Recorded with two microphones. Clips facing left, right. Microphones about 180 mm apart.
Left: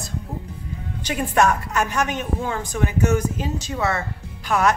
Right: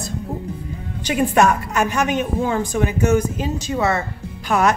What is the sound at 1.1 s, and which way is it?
A woman's voice, 10° right (ahead or behind).